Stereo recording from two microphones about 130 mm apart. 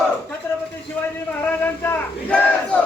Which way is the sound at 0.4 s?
15° left (ahead or behind).